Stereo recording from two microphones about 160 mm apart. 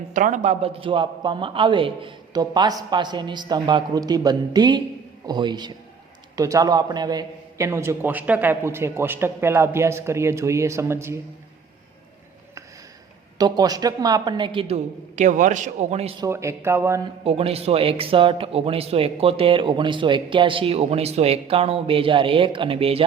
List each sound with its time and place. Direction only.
0.1 s a man's voice: 55° right (ahead or behind); by 11.2 s 15° right (ahead or behind)
13.4 s a man's voice: 25° right (ahead or behind)
15.1 s a man's voice: 50° right (ahead or behind)
16.2 s a man's voice: 20° right (ahead or behind)
17.2 s speech: 40° right (ahead or behind)